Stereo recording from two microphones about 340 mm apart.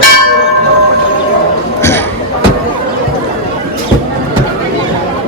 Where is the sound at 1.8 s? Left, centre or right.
Centre.